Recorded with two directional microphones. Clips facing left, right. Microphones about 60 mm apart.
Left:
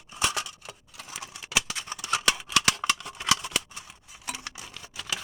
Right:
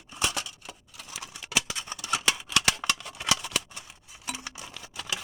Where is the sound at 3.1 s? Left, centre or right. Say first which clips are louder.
Left 2 dB; centre.